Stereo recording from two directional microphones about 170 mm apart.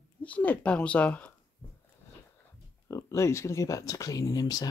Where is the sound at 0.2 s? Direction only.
10° left (ahead or behind).